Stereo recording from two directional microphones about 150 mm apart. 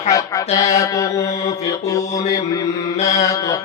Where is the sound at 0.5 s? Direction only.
20° left (ahead or behind).